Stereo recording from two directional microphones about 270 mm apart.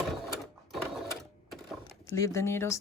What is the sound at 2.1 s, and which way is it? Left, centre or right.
Speech, centre.